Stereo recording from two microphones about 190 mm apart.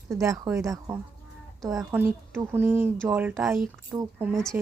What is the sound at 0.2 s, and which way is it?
Speech, 15° right (ahead or behind).